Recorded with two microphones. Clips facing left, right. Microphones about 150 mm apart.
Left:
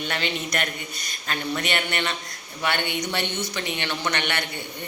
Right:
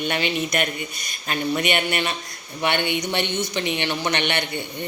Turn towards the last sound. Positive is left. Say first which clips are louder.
# right 3 dB
turn(degrees=-20)  # may be behind; listen again after turning